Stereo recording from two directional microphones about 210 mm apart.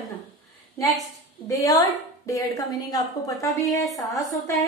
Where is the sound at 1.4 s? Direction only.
15° left (ahead or behind).